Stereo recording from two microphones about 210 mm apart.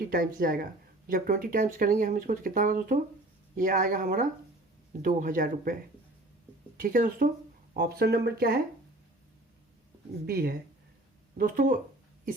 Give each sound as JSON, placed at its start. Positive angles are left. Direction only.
{"t": 0.1, "sound": "speech", "side_deg": -40}
{"t": 6.7, "sound": "speech", "side_deg": -40}
{"t": 10.2, "sound": "speech", "side_deg": -50}